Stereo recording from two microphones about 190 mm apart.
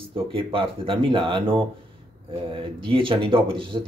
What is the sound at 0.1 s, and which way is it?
Speech, 30° right (ahead or behind).